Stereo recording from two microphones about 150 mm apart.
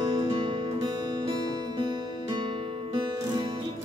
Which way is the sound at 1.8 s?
30° right (ahead or behind).